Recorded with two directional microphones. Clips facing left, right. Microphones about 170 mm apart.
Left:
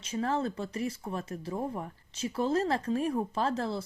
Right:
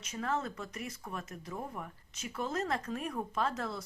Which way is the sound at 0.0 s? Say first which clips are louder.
Left 5 dB; 30° left (ahead or behind).